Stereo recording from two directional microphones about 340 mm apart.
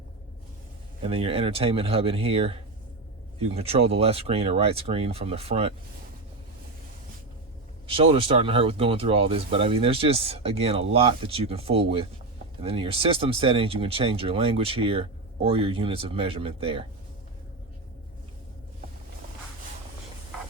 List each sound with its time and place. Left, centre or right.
1.0 s speech: centre
7.9 s speech: centre